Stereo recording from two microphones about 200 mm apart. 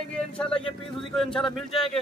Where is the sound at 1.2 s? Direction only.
Centre (ahead or behind).